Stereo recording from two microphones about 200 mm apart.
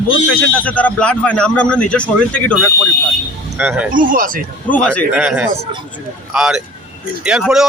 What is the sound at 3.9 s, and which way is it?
Speech, 45° right (ahead or behind).